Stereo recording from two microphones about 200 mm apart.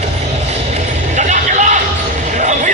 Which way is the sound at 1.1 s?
35° right (ahead or behind).